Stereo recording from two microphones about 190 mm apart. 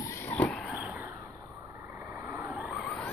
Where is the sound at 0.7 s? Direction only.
10° right (ahead or behind).